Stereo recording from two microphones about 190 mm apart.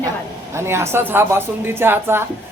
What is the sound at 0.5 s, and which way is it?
Speech, 15° right (ahead or behind).